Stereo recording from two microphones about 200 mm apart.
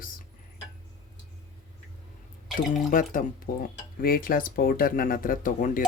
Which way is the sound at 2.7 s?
40° left (ahead or behind).